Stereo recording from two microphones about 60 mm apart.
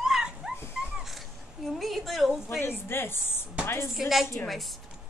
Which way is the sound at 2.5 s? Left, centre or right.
Left.